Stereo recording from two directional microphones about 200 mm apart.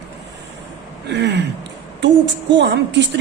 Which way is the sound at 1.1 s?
60° right (ahead or behind).